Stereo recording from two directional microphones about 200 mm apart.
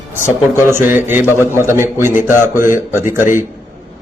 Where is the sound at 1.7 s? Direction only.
10° right (ahead or behind).